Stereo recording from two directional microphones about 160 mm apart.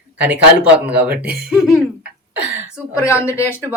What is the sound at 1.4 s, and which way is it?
Cough, 5° right (ahead or behind).